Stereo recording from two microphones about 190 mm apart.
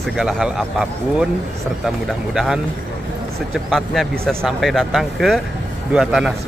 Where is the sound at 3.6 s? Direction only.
Centre (ahead or behind).